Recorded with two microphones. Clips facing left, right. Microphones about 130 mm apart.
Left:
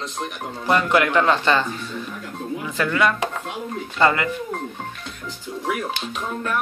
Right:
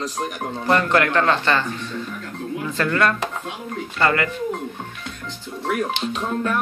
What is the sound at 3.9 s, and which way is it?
Speech, 20° left (ahead or behind).